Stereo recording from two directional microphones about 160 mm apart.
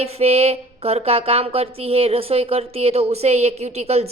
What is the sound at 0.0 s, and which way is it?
Speech, 40° right (ahead or behind).